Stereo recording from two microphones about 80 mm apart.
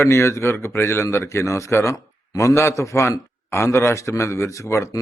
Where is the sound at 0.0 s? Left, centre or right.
Left.